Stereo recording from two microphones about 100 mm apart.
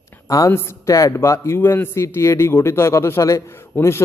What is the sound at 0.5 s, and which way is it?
Speech, 25° left (ahead or behind).